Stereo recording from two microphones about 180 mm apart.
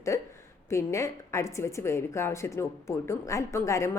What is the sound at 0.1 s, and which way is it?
A woman's voice, 15° left (ahead or behind).